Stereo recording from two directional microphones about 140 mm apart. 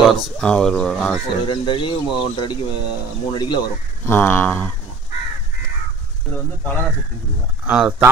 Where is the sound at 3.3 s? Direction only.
35° left (ahead or behind).